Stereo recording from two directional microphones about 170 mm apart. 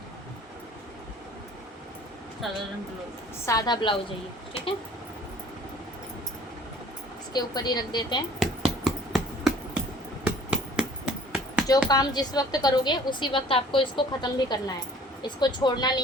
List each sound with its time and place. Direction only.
2.4 s speech: centre (ahead or behind)
3.4 s a woman's voice: 20° left (ahead or behind)
7.3 s a woman's voice: 25° left (ahead or behind)
8.4 s a sound: centre (ahead or behind)
11.9 s a woman's voice: 25° left (ahead or behind)